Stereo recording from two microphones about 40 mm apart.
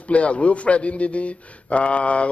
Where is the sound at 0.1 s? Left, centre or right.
Left.